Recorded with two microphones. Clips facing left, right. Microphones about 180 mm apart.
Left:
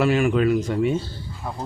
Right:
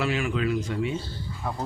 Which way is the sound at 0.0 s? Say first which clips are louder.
Left 7 dB; 50° left (ahead or behind).